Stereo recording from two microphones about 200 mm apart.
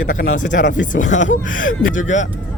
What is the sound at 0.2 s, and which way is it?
Speech, 40° left (ahead or behind).